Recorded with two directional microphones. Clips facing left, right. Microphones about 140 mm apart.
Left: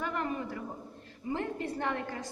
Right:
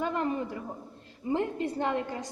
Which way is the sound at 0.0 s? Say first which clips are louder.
Right 4 dB; 25° right (ahead or behind).